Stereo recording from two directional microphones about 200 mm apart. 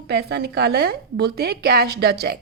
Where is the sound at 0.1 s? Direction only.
55° right (ahead or behind).